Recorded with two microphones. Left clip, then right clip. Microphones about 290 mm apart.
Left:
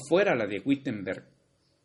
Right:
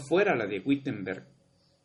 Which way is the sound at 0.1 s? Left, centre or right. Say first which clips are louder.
Left 1 dB; left.